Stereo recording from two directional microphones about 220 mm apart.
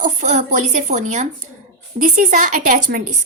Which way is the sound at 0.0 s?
35° right (ahead or behind).